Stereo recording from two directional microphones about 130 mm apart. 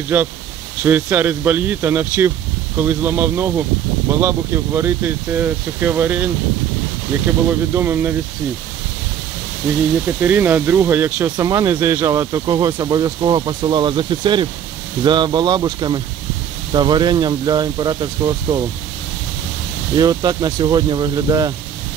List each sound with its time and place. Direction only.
0.1 s speech: 15° right (ahead or behind)
7.4 s speech: 15° right (ahead or behind)
10.0 s speech: 15° right (ahead or behind)
11.3 s speech: 25° right (ahead or behind)
11.7 s speech: 15° right (ahead or behind); by 18.6 s 35° right (ahead or behind)
20.0 s speech: 30° right (ahead or behind)